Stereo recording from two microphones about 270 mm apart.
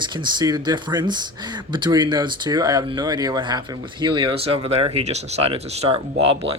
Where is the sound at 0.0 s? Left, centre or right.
Centre.